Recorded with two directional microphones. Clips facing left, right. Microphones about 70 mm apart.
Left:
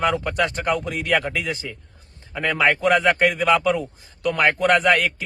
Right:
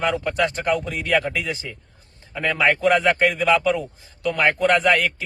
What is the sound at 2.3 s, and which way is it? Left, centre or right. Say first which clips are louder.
A man's voice: even; centre.